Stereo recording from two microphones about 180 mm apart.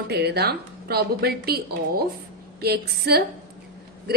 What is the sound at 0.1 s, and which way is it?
A woman's voice, 65° right (ahead or behind).